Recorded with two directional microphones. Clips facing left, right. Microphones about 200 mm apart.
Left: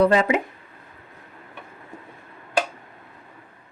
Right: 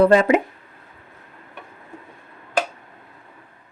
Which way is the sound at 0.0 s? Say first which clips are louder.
Right 4 dB; 50° right (ahead or behind).